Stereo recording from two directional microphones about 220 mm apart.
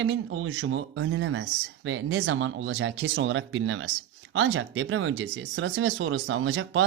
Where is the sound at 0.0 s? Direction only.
65° right (ahead or behind).